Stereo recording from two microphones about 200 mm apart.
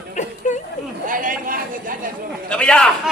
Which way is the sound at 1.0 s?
45° right (ahead or behind).